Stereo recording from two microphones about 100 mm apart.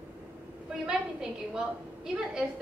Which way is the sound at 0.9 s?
5° right (ahead or behind).